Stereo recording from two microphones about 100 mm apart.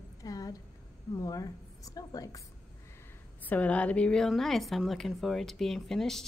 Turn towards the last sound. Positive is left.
turn(degrees=5)  # may be behind; listen again after turning